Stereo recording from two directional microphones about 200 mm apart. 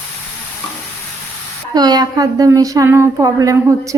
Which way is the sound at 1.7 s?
20° right (ahead or behind).